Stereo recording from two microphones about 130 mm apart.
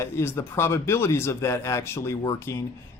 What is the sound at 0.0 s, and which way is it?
Speech, 20° left (ahead or behind).